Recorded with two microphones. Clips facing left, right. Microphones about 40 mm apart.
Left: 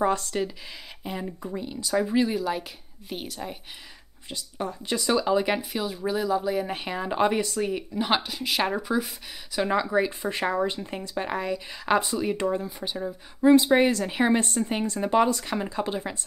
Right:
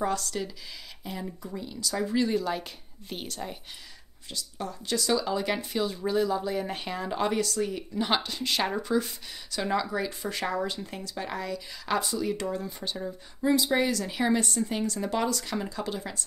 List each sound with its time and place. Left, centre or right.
0.0 s speech: left
2.2 s a woman's voice: centre
4.3 s speech: left
5.7 s speech: centre
7.0 s speech: left
8.0 s speech: centre
9.6 s speech: left
12.6 s speech: centre
13.4 s speech: left